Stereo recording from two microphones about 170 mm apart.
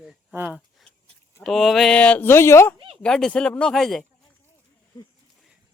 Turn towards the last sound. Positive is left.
turn(degrees=20)  # may be behind; listen again after turning